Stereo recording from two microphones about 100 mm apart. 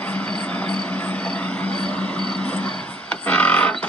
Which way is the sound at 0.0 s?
10° left (ahead or behind).